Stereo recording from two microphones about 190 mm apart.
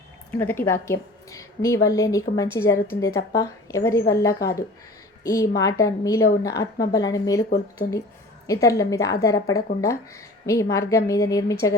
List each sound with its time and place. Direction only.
0.3 s a woman's voice: 10° left (ahead or behind)